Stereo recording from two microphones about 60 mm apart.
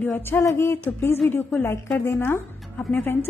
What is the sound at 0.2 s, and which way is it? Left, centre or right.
A woman's voice, left.